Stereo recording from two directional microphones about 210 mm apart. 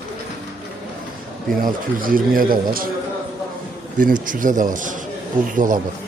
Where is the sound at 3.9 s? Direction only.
40° right (ahead or behind).